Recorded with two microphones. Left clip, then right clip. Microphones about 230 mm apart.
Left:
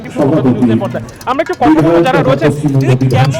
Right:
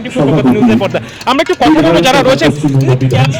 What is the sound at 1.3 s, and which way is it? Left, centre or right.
A man's voice, right.